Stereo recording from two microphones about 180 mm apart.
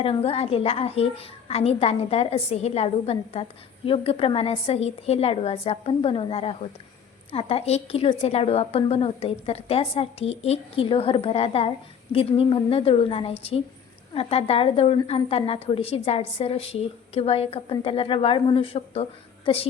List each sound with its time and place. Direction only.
0.0 s a woman's voice: 30° left (ahead or behind)